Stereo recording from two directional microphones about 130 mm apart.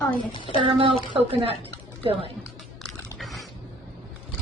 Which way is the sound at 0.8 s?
45° right (ahead or behind).